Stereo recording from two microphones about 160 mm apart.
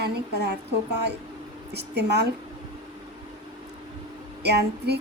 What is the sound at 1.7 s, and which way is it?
Speech, 90° right.